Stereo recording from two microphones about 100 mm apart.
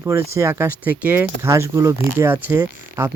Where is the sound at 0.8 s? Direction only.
15° right (ahead or behind).